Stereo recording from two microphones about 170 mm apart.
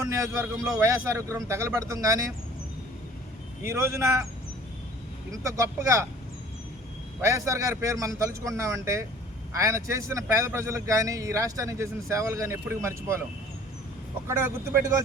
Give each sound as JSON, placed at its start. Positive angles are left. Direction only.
{"t": 0.1, "sound": "speech", "side_deg": -20}
{"t": 3.6, "sound": "speech", "side_deg": -15}
{"t": 5.4, "sound": "speech", "side_deg": -20}
{"t": 7.3, "sound": "speech", "side_deg": -20}
{"t": 14.3, "sound": "speech", "side_deg": -15}